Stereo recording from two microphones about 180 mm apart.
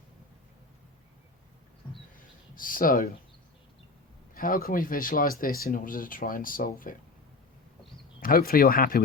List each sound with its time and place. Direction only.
2.6 s speech: 50° left (ahead or behind)
4.4 s speech: 50° left (ahead or behind)
8.2 s speech: 55° left (ahead or behind)